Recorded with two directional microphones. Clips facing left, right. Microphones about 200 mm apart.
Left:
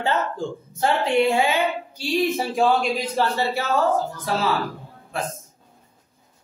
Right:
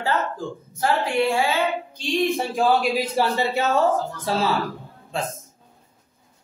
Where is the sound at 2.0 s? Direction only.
5° left (ahead or behind); by 3.4 s 10° right (ahead or behind).